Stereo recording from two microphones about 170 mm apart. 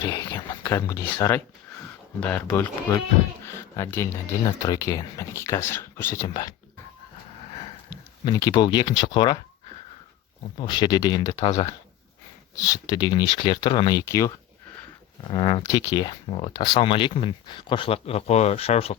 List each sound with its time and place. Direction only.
0.0 s speech: 25° left (ahead or behind)
0.3 s speech: 15° left (ahead or behind)
8.2 s speech: 20° left (ahead or behind)
10.6 s speech: 25° left (ahead or behind)
15.3 s speech: 30° left (ahead or behind)